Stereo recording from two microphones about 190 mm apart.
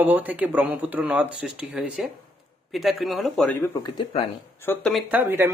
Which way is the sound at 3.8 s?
25° left (ahead or behind).